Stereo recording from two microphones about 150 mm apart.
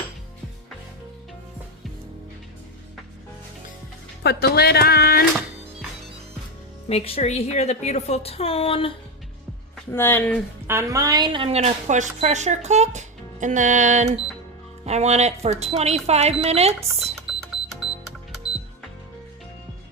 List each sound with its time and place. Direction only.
4.2 s speech: 90° left
6.8 s a woman's voice: 40° left (ahead or behind)
9.9 s speech: 15° left (ahead or behind)
10.7 s a woman's voice: 20° right (ahead or behind); by 17.2 s 45° right (ahead or behind)